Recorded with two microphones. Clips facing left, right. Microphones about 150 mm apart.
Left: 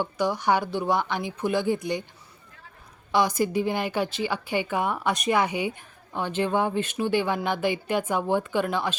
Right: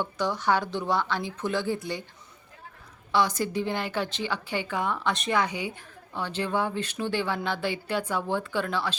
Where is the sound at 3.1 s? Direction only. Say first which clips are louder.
Left 3 dB; 10° left (ahead or behind).